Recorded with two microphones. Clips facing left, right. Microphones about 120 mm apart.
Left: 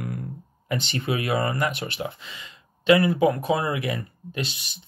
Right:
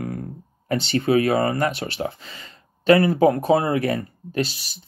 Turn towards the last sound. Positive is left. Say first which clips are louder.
# right 7 dB
turn(degrees=-35)  # may be behind; listen again after turning